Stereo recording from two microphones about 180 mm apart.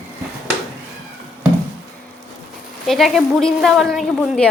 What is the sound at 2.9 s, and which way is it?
A woman's voice, centre (ahead or behind).